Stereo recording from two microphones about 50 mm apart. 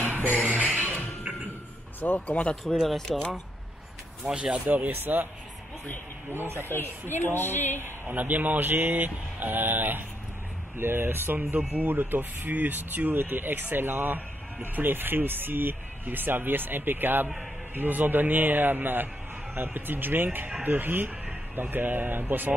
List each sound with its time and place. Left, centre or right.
0.7 s music: left
2.0 s speech: left
3.1 s speech: centre
4.3 s speech: right
4.6 s speech: right
6.3 s speech: right
6.6 s speech: left
8.1 s speech: right